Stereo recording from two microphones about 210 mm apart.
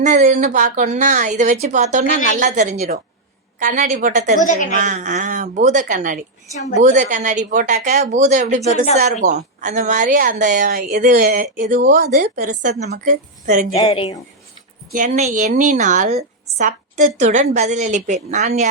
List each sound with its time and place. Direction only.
0.0 s a woman's voice: 35° right (ahead or behind)
4.4 s a woman's voice: 35° left (ahead or behind)
4.7 s a woman's voice: 40° right (ahead or behind)
13.7 s speech: 20° left (ahead or behind)
14.9 s a woman's voice: 35° right (ahead or behind)